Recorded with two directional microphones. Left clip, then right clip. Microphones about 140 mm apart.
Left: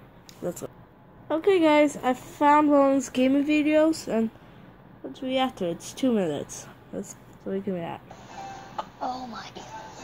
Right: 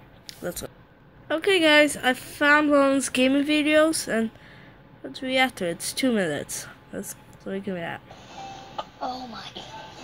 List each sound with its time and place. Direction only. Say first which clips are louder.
0.3 s a sound: right 6 dB; 20° left (ahead or behind)
1.3 s a woman's voice: right 2 dB; 10° left (ahead or behind); by 6.4 s 10° right (ahead or behind)
6.4 s speech: right 3 dB; 30° right (ahead or behind)
6.9 s speech: left 1 dB; centre (ahead or behind)
7.4 s speech: even; 10° left (ahead or behind)
8.1 s music: even; 30° right (ahead or behind)